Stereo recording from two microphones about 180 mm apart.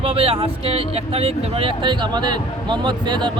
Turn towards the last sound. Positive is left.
turn(degrees=-25)  # may be behind; listen again after turning